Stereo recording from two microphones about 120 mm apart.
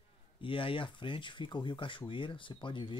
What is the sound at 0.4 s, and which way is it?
Speech, 45° left (ahead or behind).